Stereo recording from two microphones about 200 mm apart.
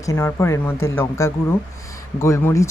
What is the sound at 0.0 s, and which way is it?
Speech, 15° left (ahead or behind).